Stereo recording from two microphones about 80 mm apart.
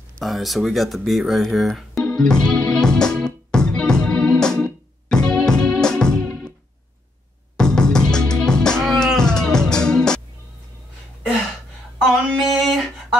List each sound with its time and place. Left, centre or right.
0.2 s speech: centre
2.0 s music: centre
7.5 s music: centre
12.3 s a sound: centre